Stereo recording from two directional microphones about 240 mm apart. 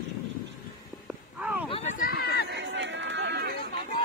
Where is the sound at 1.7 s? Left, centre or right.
Left.